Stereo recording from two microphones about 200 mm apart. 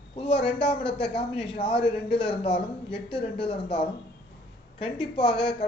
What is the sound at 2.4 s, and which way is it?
Speech, 25° left (ahead or behind).